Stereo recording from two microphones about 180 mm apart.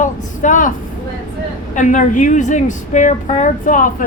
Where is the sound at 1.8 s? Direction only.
45° left (ahead or behind).